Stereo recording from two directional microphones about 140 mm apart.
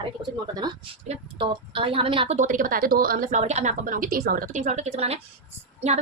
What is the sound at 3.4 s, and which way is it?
A woman's voice, 55° right (ahead or behind).